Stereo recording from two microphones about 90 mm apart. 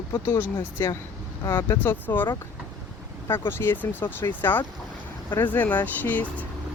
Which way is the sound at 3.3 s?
25° left (ahead or behind).